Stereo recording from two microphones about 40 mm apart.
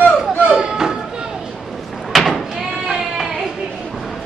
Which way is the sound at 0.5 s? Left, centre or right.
Centre.